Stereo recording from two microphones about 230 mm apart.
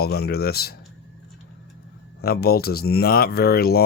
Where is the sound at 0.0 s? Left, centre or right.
Left.